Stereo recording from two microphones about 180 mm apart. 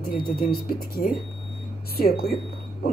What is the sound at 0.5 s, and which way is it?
Speech, 55° left (ahead or behind).